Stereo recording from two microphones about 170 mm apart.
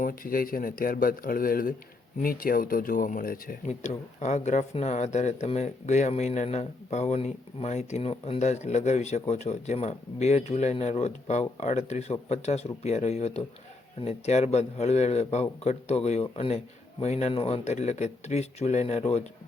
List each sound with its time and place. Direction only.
0.0 s speech: 60° left (ahead or behind)
3.7 s speech: 45° left (ahead or behind)